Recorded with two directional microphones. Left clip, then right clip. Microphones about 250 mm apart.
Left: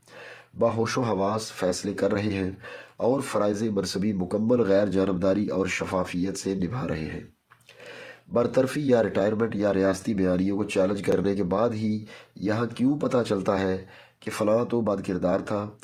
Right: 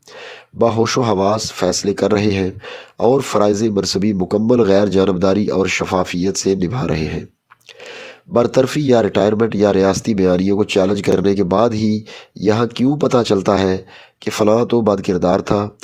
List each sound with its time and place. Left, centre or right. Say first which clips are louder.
0.6 s speech: right 9 dB; right